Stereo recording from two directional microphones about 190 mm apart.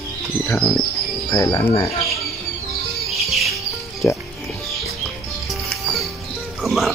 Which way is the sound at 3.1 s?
Centre (ahead or behind).